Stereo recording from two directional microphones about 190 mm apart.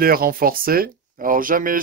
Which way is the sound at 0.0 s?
50° right (ahead or behind).